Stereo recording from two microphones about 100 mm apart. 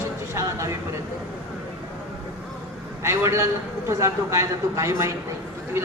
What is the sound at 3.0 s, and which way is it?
A man's voice, 30° right (ahead or behind).